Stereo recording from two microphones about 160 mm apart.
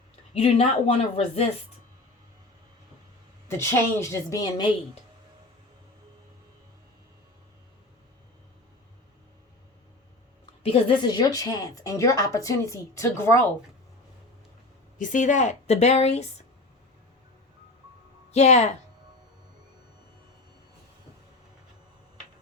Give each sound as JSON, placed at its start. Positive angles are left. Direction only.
{"t": 0.3, "sound": "speech", "side_deg": 40}
{"t": 3.6, "sound": "a woman's voice", "side_deg": 15}
{"t": 10.6, "sound": "a woman's voice", "side_deg": 40}
{"t": 11.0, "sound": "speech", "side_deg": 25}
{"t": 14.9, "sound": "a woman's voice", "side_deg": 55}
{"t": 18.3, "sound": "speech", "side_deg": 45}